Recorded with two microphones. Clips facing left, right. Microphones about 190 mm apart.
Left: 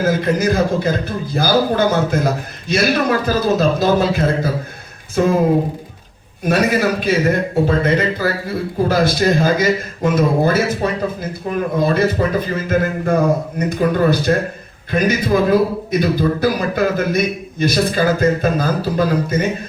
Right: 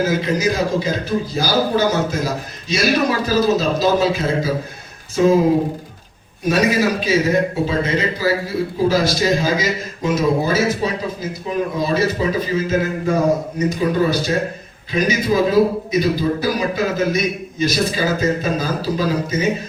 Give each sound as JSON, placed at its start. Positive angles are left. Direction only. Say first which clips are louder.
{"t": 0.0, "sound": "a man's voice", "louder": "left 2 dB", "side_deg": 55}
{"t": 6.5, "sound": "a man's voice", "louder": "left 1 dB", "side_deg": 55}